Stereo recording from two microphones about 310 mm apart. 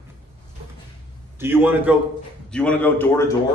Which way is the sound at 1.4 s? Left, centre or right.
Centre.